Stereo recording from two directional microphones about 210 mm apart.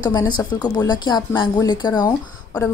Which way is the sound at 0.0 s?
20° left (ahead or behind).